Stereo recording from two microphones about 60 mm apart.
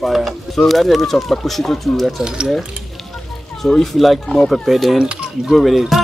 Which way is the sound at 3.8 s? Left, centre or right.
Centre.